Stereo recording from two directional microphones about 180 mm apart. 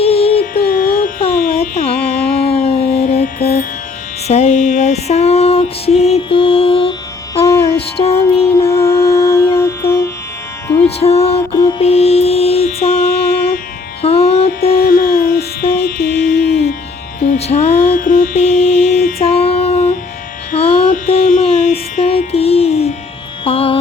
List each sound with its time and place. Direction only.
0.0 s music: 35° left (ahead or behind)
0.5 s music: 55° left (ahead or behind)
1.3 s carnatic music: 50° left (ahead or behind)
3.2 s music: 55° left (ahead or behind)
4.3 s mantra: 40° left (ahead or behind)
7.4 s music: 15° left (ahead or behind)
7.9 s music: 35° left (ahead or behind)
8.7 s music: 15° left (ahead or behind)
10.8 s music: 35° left (ahead or behind)
11.8 s mantra: 35° left (ahead or behind); by 13.6 s 55° left (ahead or behind)
14.0 s music: 35° left (ahead or behind)
14.8 s music: 55° left (ahead or behind)
17.3 s music: 35° left (ahead or behind)
17.8 s music: 50° left (ahead or behind); by 23.7 s 30° left (ahead or behind)